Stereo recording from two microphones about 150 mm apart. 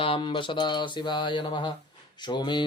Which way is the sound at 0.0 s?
35° left (ahead or behind).